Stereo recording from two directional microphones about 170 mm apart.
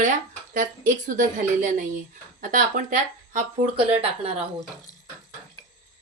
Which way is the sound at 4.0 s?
35° right (ahead or behind).